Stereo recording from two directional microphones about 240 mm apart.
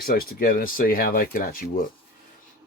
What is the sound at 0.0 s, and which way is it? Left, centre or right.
Speech, left.